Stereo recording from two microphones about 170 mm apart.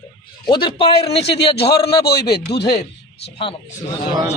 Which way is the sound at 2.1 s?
70° left (ahead or behind).